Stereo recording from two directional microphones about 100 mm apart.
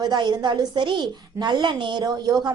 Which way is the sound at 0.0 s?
45° right (ahead or behind).